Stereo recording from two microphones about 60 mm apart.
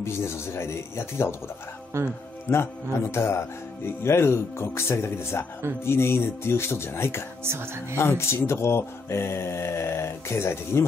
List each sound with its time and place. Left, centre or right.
0.0 s speech: left
1.9 s speech: right
2.4 s speech: left